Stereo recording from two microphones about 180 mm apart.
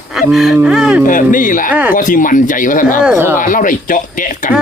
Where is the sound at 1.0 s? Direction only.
50° left (ahead or behind).